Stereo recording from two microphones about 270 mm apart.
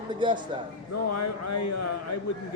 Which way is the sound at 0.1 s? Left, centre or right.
Centre.